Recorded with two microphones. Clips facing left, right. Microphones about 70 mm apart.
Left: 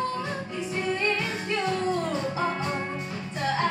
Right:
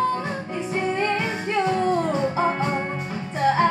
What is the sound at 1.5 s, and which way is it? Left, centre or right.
Music, centre.